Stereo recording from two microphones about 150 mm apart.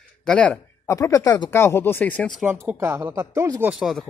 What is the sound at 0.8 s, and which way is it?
Speech, 20° left (ahead or behind).